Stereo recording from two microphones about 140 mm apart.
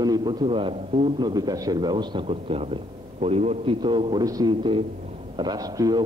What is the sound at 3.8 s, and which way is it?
A man's voice, 35° right (ahead or behind).